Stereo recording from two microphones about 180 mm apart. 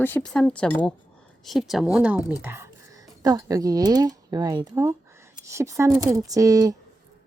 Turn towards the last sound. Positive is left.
turn(degrees=-20)  # may be behind; listen again after turning